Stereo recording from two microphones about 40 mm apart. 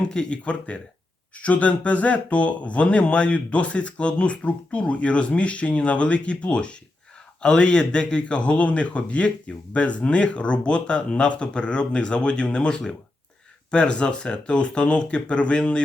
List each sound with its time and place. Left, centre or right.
0.0 s speech: left